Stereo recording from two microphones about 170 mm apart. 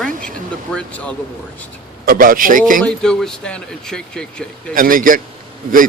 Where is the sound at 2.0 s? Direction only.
55° right (ahead or behind).